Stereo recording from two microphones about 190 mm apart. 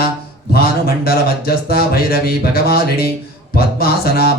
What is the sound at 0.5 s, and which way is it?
Speech, 55° left (ahead or behind).